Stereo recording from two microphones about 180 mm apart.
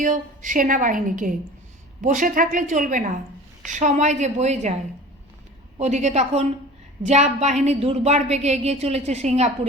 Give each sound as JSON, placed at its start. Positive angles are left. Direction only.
{"t": 0.0, "sound": "a woman's voice", "side_deg": -45}
{"t": 5.7, "sound": "a woman's voice", "side_deg": -40}